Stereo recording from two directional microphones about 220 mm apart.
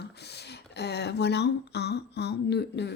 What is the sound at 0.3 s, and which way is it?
A woman's voice, 50° left (ahead or behind).